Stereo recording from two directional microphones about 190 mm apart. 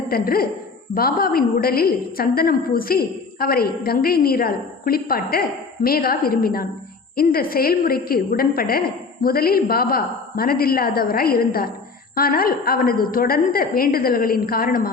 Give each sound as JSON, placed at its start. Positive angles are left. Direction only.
{"t": 0.1, "sound": "a woman's voice", "side_deg": 50}